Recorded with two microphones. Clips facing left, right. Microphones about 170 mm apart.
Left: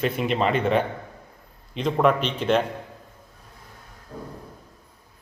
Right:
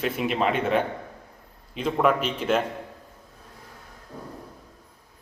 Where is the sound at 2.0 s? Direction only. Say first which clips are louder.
Left 2 dB; 5° right (ahead or behind).